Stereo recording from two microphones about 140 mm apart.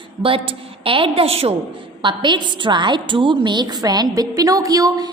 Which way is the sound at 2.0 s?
35° right (ahead or behind).